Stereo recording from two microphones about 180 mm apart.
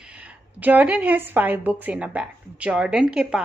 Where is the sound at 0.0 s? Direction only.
5° right (ahead or behind).